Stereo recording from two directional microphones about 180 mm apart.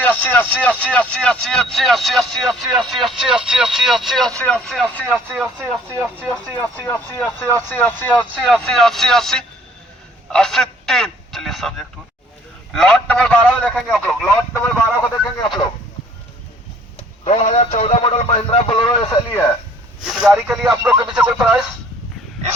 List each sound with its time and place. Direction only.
0.0 s speech: 10° left (ahead or behind)
6.6 s a man's voice: 15° left (ahead or behind)
14.5 s speech: 10° left (ahead or behind)
17.2 s speech: 35° left (ahead or behind)
20.0 s speech: 5° right (ahead or behind)